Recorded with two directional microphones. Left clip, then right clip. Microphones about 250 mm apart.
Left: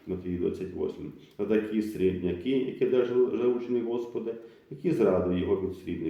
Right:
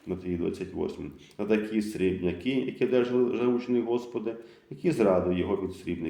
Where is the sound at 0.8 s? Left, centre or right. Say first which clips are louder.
Even; right.